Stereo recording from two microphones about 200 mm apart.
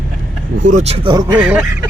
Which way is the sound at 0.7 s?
30° right (ahead or behind).